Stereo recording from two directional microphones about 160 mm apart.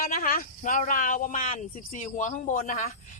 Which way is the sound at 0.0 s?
60° left (ahead or behind).